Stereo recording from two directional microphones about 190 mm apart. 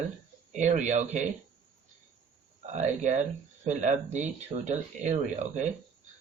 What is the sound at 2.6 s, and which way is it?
Speech, 40° right (ahead or behind).